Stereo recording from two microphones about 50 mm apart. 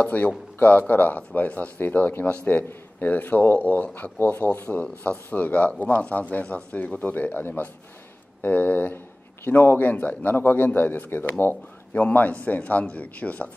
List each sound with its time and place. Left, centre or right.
0.0 s a man's voice: left
11.9 s speech: left